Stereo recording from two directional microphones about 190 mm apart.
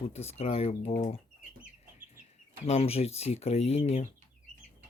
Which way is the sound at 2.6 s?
35° left (ahead or behind).